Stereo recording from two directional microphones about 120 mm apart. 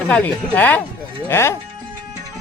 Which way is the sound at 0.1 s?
15° left (ahead or behind).